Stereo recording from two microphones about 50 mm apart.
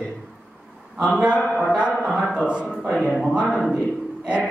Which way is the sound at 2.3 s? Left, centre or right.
Right.